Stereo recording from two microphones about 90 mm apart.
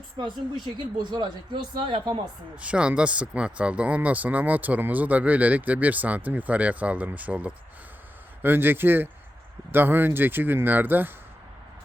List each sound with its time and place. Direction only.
0.2 s speech: 55° right (ahead or behind)
2.6 s speech: 10° right (ahead or behind)